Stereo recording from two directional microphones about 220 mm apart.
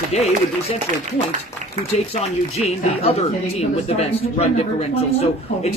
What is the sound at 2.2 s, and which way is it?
Speech, 30° left (ahead or behind).